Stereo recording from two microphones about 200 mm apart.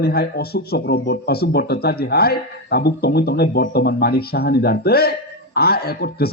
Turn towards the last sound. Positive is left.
turn(degrees=50)  # may be behind; listen again after turning